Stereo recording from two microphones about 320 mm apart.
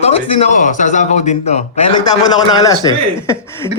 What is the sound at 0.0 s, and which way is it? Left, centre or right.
A man's voice, left.